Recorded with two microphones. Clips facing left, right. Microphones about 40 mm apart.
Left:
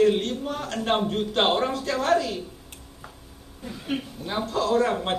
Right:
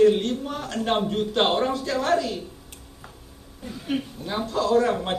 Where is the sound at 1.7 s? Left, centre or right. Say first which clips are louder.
Right 1 dB; left.